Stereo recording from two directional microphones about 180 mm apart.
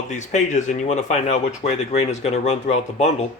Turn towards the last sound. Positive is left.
turn(degrees=40)  # may be behind; listen again after turning